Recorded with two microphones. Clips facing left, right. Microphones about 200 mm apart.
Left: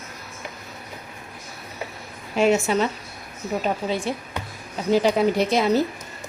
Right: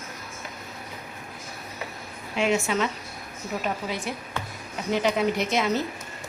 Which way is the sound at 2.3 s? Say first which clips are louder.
Left 5 dB; 40° left (ahead or behind).